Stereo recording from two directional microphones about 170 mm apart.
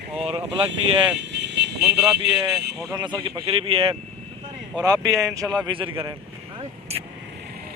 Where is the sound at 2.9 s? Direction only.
25° right (ahead or behind).